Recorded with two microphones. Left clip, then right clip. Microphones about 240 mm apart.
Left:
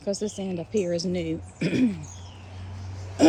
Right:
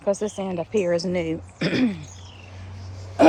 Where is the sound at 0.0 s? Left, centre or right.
Right.